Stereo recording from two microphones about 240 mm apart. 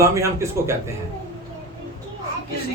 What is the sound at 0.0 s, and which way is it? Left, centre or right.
Speech, centre.